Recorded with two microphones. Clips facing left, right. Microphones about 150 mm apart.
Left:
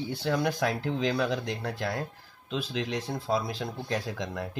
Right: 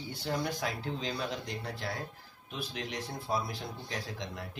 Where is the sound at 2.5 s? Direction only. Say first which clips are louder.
Left 8 dB; 90° left.